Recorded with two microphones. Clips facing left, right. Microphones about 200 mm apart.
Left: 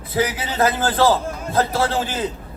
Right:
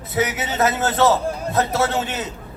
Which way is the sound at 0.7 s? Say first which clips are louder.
Right 1 dB; 30° left (ahead or behind).